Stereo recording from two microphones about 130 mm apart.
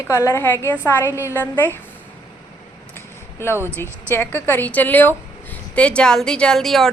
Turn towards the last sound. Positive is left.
turn(degrees=5)  # may be behind; listen again after turning